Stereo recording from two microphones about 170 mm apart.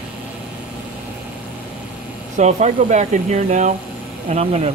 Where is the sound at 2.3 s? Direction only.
45° right (ahead or behind).